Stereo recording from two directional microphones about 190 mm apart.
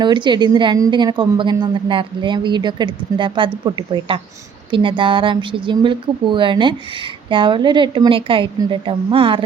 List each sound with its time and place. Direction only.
0.0 s a woman's voice: 25° right (ahead or behind)